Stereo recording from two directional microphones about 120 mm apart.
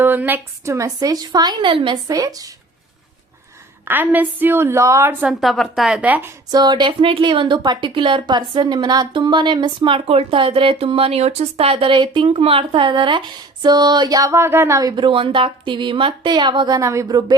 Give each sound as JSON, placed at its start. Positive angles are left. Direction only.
{"t": 0.0, "sound": "a woman's voice", "side_deg": -15}
{"t": 2.0, "sound": "a woman's voice", "side_deg": -30}
{"t": 3.8, "sound": "a woman's voice", "side_deg": -15}
{"t": 5.2, "sound": "a woman's voice", "side_deg": 0}
{"t": 6.5, "sound": "a woman's voice", "side_deg": -35}